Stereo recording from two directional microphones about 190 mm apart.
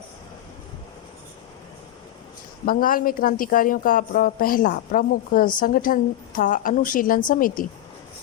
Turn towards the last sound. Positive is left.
turn(degrees=45)  # may be behind; listen again after turning